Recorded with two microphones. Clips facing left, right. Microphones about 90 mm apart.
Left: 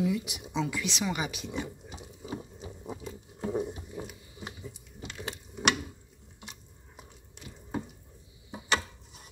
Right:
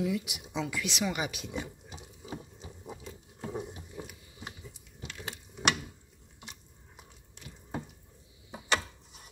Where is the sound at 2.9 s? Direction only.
10° left (ahead or behind).